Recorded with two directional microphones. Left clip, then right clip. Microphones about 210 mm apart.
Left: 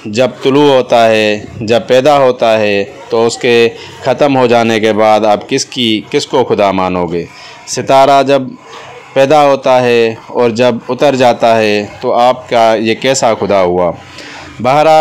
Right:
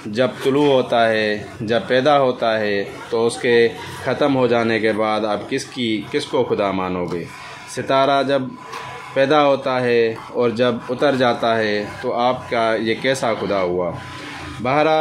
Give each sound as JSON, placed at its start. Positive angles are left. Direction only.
{"t": 0.1, "sound": "speech", "side_deg": 30}